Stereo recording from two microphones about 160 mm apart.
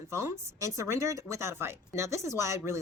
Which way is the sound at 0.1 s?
15° right (ahead or behind).